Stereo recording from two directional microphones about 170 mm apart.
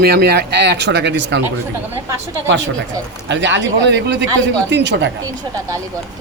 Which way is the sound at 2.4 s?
90° right.